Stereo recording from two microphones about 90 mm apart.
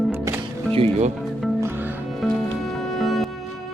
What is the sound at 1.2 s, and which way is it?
Music, centre (ahead or behind).